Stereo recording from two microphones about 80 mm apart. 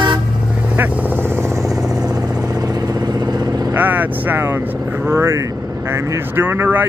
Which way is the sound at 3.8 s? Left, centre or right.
Right.